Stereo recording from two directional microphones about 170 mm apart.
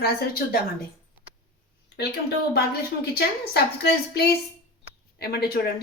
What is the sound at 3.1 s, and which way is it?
Speech, 70° left (ahead or behind).